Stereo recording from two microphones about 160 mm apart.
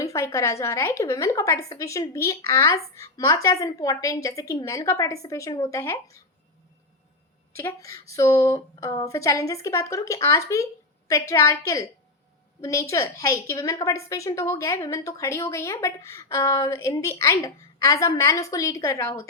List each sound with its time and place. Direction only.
0.0 s a woman's voice: 20° left (ahead or behind)
7.5 s a woman's voice: 20° left (ahead or behind)